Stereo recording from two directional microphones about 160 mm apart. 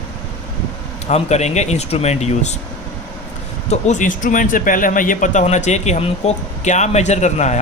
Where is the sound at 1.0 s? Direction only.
45° left (ahead or behind).